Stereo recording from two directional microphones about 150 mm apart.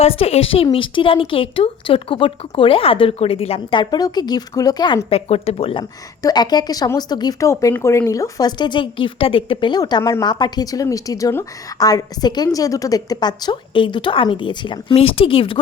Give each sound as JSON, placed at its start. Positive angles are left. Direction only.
{"t": 0.0, "sound": "speech", "side_deg": 40}
{"t": 6.2, "sound": "speech", "side_deg": 25}